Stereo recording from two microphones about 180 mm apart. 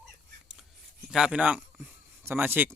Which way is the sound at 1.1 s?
5° right (ahead or behind).